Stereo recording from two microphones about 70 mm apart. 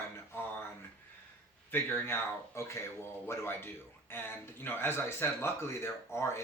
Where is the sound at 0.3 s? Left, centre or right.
Left.